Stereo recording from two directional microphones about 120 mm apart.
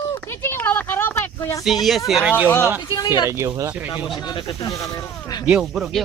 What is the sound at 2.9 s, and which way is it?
Speech, 35° left (ahead or behind).